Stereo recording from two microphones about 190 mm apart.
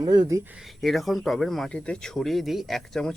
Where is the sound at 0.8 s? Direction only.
Centre (ahead or behind).